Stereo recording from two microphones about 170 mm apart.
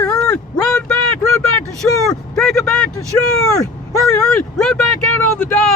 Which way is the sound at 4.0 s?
5° left (ahead or behind).